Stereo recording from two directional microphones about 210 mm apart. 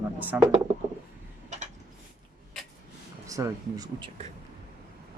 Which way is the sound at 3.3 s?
15° right (ahead or behind).